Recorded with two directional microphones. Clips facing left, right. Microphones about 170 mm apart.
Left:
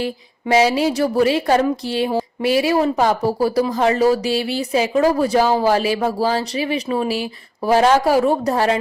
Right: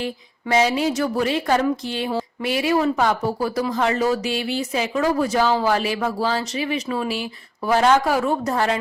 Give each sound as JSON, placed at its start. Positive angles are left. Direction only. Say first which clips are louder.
{"t": 0.4, "sound": "speech", "louder": "left 4 dB", "side_deg": 30}